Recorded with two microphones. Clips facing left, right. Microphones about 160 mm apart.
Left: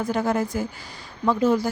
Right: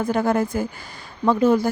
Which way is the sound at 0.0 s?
55° right (ahead or behind).